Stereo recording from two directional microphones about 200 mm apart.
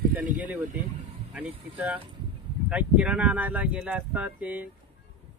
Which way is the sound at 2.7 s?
5° right (ahead or behind).